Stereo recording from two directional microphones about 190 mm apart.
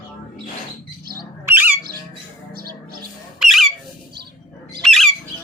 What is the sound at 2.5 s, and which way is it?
Music, 55° right (ahead or behind).